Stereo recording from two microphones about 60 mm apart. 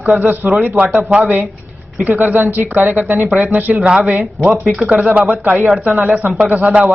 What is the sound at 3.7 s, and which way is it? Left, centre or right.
Speech, centre.